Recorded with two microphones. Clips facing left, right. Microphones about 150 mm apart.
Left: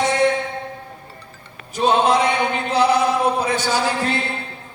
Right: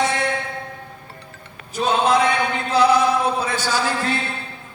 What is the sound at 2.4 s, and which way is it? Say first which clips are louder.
Chant: even; 20° left (ahead or behind).